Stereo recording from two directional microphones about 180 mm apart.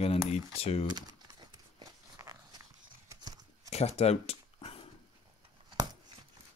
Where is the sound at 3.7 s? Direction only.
35° left (ahead or behind).